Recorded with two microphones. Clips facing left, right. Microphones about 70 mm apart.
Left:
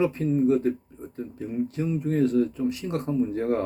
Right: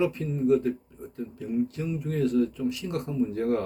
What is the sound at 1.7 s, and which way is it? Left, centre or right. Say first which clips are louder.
Speech: left 5 dB; left.